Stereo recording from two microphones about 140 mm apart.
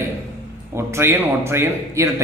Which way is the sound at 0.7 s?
20° right (ahead or behind).